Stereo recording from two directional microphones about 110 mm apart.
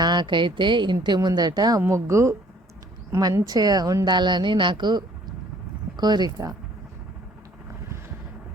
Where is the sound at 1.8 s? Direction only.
25° right (ahead or behind).